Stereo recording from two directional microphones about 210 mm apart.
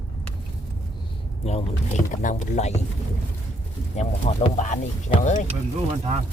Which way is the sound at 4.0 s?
30° left (ahead or behind).